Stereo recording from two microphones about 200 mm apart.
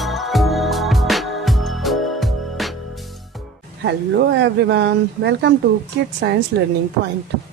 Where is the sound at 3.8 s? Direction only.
60° right (ahead or behind).